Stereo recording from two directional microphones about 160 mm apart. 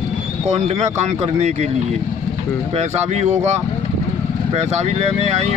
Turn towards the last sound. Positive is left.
turn(degrees=-40)  # may be behind; listen again after turning